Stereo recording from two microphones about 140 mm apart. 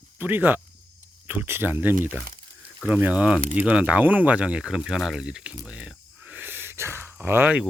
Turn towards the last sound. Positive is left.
turn(degrees=-10)  # may be behind; listen again after turning